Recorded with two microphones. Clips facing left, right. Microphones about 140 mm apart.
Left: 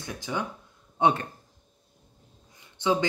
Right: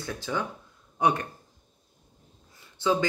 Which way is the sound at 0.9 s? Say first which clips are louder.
Left 1 dB; 25° left (ahead or behind).